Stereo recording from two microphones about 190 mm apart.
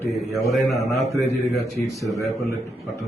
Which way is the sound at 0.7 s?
15° left (ahead or behind).